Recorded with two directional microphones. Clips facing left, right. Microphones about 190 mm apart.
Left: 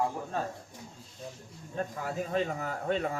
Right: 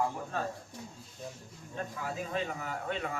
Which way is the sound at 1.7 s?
40° left (ahead or behind).